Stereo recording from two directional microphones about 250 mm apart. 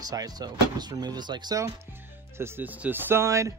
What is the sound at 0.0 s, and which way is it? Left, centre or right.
Speech, centre.